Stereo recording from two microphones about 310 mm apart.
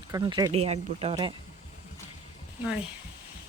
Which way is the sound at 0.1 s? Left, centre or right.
Centre.